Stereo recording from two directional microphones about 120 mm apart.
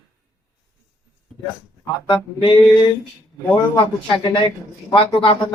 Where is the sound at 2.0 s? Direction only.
45° left (ahead or behind).